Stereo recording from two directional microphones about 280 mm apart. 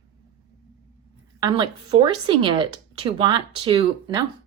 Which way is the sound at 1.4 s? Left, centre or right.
Centre.